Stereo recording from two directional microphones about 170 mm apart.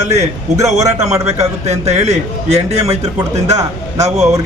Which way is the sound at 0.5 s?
20° right (ahead or behind).